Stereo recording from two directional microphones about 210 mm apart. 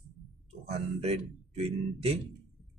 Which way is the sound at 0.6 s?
30° right (ahead or behind).